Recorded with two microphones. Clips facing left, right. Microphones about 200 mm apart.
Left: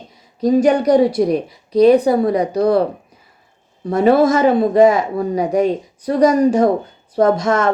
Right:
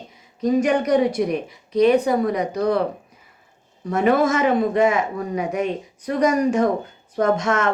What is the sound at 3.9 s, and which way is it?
A woman's voice, 35° left (ahead or behind).